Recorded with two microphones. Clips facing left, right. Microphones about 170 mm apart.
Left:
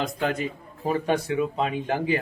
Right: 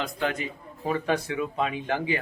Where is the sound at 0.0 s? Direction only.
40° left (ahead or behind).